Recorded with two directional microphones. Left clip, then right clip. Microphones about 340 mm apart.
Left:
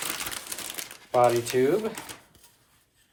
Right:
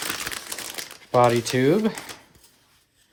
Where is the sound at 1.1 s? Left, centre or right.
Right.